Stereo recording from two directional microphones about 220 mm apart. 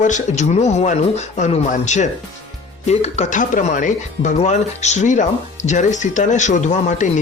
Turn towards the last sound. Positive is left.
turn(degrees=35)  # may be behind; listen again after turning